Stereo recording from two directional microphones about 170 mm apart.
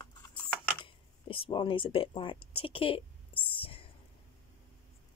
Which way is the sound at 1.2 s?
30° left (ahead or behind).